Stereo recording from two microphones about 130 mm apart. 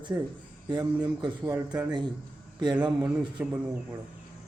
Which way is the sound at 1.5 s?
10° right (ahead or behind).